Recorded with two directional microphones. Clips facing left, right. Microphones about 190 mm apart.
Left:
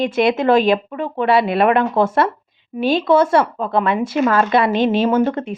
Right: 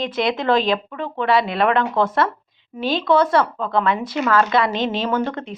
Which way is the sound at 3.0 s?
25° left (ahead or behind).